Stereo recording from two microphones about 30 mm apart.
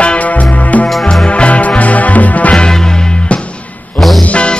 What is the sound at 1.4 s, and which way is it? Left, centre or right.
Music, left.